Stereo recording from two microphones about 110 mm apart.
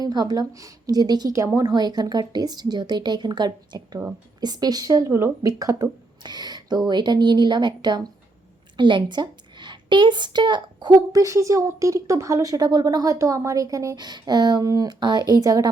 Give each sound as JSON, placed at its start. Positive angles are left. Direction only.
{"t": 0.0, "sound": "a woman's voice", "side_deg": -35}